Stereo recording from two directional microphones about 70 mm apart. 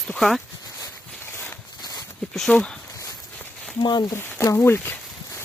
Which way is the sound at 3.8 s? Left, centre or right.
Left.